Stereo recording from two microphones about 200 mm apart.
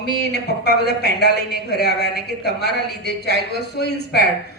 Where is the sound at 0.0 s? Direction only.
55° left (ahead or behind).